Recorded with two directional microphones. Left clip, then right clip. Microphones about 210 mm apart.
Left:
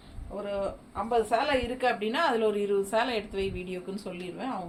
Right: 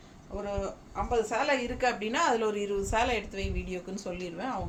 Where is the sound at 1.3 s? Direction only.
15° right (ahead or behind).